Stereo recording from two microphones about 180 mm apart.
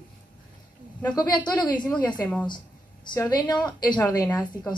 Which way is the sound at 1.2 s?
25° left (ahead or behind).